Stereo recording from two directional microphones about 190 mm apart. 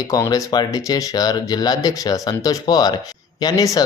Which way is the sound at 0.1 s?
15° left (ahead or behind).